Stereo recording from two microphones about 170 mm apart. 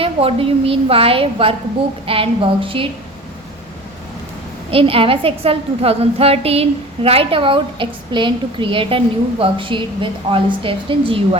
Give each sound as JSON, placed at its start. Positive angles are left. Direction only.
{"t": 0.0, "sound": "a woman's voice", "side_deg": -35}
{"t": 4.7, "sound": "a woman's voice", "side_deg": -35}